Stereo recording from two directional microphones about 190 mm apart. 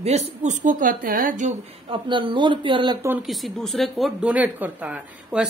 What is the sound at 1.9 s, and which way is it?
Speech, 25° right (ahead or behind).